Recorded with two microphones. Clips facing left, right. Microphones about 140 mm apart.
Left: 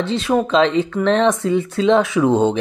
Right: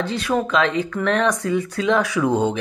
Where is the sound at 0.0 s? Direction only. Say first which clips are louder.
Left 4 dB; 25° left (ahead or behind).